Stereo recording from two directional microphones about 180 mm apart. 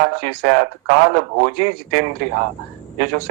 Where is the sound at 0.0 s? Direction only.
55° right (ahead or behind).